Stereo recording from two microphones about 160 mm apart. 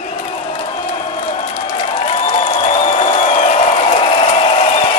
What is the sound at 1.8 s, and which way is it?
Applause, 40° left (ahead or behind).